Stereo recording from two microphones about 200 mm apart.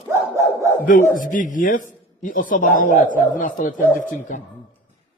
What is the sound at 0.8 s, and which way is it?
A man's voice, 40° left (ahead or behind).